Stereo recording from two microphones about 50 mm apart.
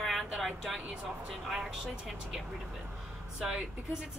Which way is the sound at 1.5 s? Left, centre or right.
Centre.